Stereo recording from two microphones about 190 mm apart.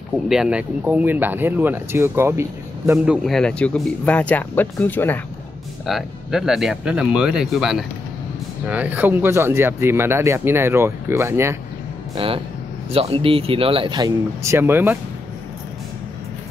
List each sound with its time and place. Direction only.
0.3 s speech: 5° right (ahead or behind)
3.3 s speech: 5° left (ahead or behind)
5.9 s speech: centre (ahead or behind)
12.2 s speech: 30° right (ahead or behind); by 15.0 s 10° right (ahead or behind)